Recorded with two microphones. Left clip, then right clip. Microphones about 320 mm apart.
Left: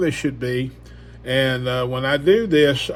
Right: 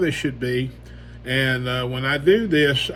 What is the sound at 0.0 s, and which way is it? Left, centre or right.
Speech, left.